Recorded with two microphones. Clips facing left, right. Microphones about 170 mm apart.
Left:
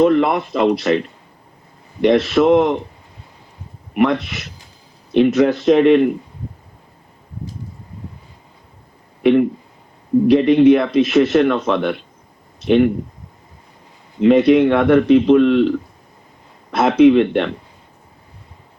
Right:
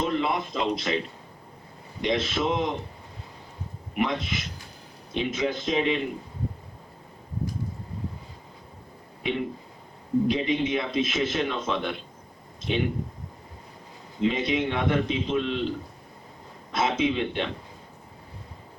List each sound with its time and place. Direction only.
0.0 s speech: 60° left (ahead or behind)
3.9 s speech: 65° left (ahead or behind)
9.2 s speech: 60° left (ahead or behind)
12.5 s a sound: 65° left (ahead or behind)
14.2 s speech: 65° left (ahead or behind)
16.7 s speech: 65° left (ahead or behind)